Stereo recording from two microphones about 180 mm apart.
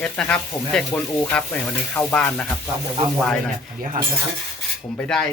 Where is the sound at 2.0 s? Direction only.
10° left (ahead or behind).